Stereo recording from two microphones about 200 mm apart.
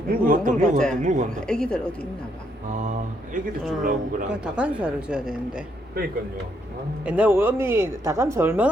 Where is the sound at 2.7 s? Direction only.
40° right (ahead or behind).